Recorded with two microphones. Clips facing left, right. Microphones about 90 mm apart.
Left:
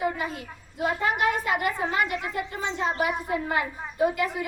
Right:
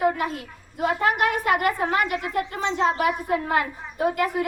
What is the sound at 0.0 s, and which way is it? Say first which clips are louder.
A woman's voice: right 5 dB; 60° right (ahead or behind).